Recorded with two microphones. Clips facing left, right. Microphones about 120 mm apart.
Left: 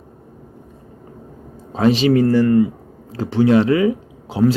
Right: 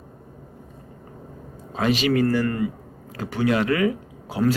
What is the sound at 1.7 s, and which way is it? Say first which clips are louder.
A man's voice: left 6 dB; 30° left (ahead or behind).